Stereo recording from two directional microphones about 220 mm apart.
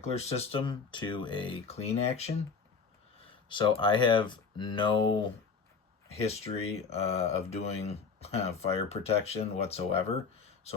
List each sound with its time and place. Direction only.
0.0 s speech: 30° left (ahead or behind)
3.5 s speech: 20° left (ahead or behind)